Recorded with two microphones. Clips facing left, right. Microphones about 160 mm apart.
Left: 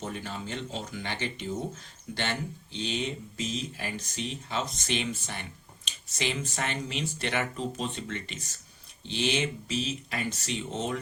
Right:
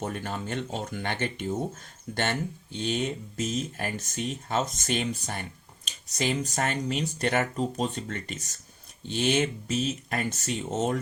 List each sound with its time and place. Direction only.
0.0 s speech: 50° right (ahead or behind)